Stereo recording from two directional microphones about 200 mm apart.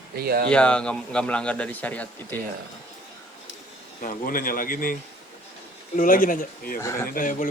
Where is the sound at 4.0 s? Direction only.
45° left (ahead or behind).